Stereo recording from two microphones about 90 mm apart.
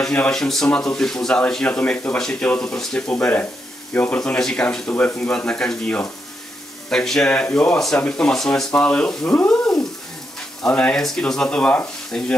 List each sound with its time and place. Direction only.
0.0 s speech: 10° left (ahead or behind)
4.2 s speech: 5° left (ahead or behind)
10.7 s speech: 15° left (ahead or behind)
11.0 s speech: 5° left (ahead or behind)